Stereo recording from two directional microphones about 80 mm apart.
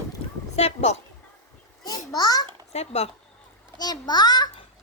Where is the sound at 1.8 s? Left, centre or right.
Left.